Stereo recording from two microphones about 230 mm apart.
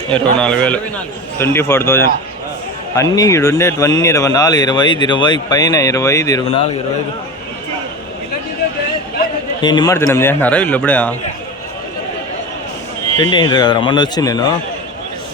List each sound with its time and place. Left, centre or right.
0.1 s a man's voice: centre; by 6.7 s left
9.6 s speech: centre
13.1 s speech: centre